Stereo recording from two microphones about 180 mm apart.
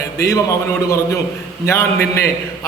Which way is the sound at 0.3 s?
15° left (ahead or behind).